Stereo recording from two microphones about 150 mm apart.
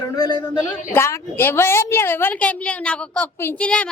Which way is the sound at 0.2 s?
30° left (ahead or behind).